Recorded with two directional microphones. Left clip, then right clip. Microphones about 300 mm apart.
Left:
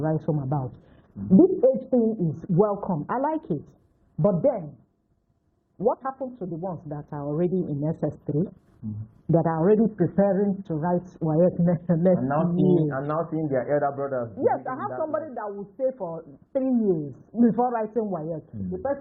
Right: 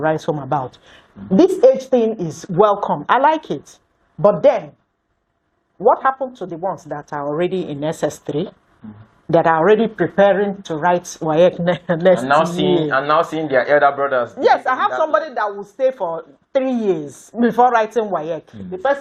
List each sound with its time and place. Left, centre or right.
0.0 s a woman's voice: centre
4.2 s speech: centre
5.8 s a woman's voice: centre
12.5 s a woman's voice: right
12.9 s speech: centre